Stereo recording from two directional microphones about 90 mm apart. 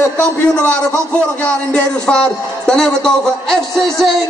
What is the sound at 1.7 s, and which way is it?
A man's voice, 10° left (ahead or behind).